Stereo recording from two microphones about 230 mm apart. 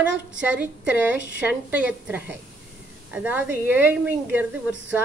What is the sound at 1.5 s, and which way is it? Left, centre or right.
A woman's voice, centre.